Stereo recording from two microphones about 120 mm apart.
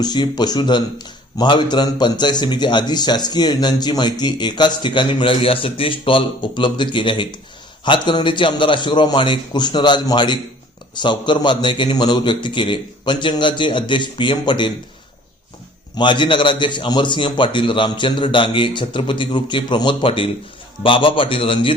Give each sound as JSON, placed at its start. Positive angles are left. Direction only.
{"t": 0.0, "sound": "speech", "side_deg": 35}
{"t": 16.0, "sound": "a man's voice", "side_deg": 40}